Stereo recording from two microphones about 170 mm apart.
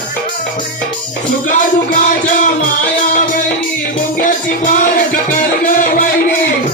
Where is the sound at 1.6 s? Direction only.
50° left (ahead or behind).